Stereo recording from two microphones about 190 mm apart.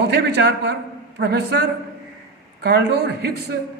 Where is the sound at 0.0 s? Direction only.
60° right (ahead or behind).